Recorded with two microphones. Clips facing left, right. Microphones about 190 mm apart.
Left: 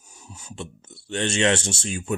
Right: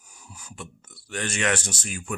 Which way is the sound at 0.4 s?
25° left (ahead or behind).